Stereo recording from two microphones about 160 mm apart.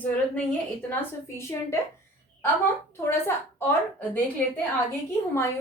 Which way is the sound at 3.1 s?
15° left (ahead or behind).